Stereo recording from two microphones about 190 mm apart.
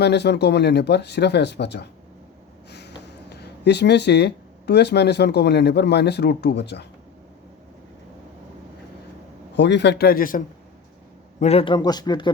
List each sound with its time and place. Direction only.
0.0 s speech: 60° left (ahead or behind)
9.6 s speech: 65° left (ahead or behind); by 10.4 s 50° left (ahead or behind)
11.3 s a man's voice: 35° left (ahead or behind)